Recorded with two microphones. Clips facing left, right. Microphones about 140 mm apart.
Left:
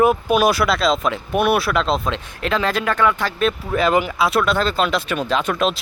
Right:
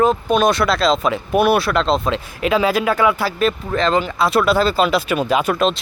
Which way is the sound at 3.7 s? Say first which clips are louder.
Even; 10° left (ahead or behind).